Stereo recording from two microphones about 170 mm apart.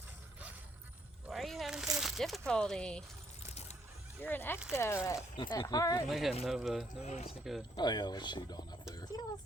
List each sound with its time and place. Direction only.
1.3 s a sound: centre (ahead or behind)
2.5 s speech: 5° left (ahead or behind)
4.2 s speech: 10° left (ahead or behind)
6.1 s speech: centre (ahead or behind)
7.0 s speech: 40° left (ahead or behind)
7.8 s speech: 25° left (ahead or behind)
9.1 s a sound: 20° left (ahead or behind)